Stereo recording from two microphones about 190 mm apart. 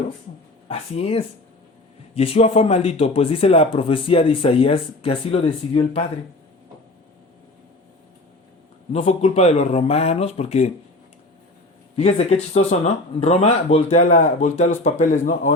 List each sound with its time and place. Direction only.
0.7 s speech: 30° left (ahead or behind)
8.9 s speech: 35° left (ahead or behind)
11.9 s speech: 30° left (ahead or behind)